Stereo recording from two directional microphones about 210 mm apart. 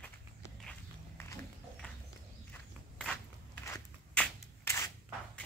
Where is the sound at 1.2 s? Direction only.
10° left (ahead or behind).